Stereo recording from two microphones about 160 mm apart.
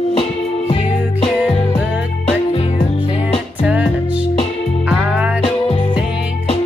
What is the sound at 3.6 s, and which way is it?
Music, 10° right (ahead or behind).